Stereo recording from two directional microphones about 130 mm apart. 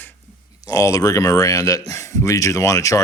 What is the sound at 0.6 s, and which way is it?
Speech, 25° left (ahead or behind).